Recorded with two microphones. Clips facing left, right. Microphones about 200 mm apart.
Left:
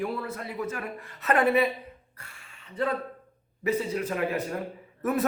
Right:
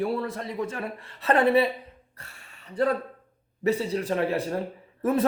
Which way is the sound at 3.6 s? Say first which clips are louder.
Right 3 dB; 35° right (ahead or behind).